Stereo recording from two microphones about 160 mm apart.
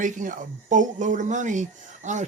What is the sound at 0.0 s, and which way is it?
Speech, 55° right (ahead or behind).